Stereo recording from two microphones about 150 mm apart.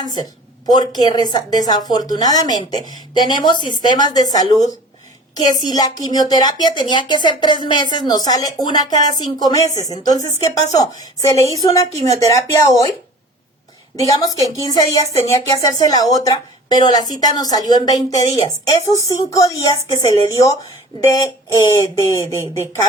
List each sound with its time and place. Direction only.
0.0 s a woman's voice: 25° left (ahead or behind)
13.9 s a woman's voice: 25° left (ahead or behind)
14.3 s a woman's voice: 20° right (ahead or behind)
14.6 s a woman's voice: 25° left (ahead or behind)